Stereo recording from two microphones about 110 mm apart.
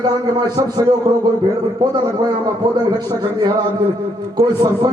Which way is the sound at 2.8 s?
40° right (ahead or behind).